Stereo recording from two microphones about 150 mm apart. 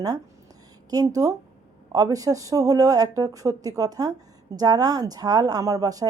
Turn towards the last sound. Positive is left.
turn(degrees=-25)  # may be behind; listen again after turning